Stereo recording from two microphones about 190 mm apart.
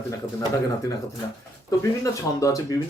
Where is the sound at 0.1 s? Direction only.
15° left (ahead or behind).